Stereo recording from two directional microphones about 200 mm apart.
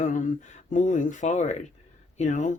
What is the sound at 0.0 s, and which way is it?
Speech, 40° left (ahead or behind).